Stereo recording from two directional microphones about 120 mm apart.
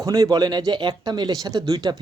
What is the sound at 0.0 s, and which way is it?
Speech, 30° right (ahead or behind).